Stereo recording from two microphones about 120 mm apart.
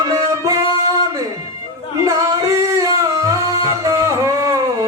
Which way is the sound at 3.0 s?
25° right (ahead or behind).